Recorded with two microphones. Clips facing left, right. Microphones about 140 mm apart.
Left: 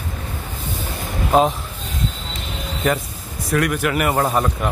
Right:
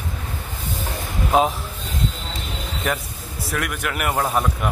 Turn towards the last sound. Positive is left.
turn(degrees=0)  # may be behind; listen again after turning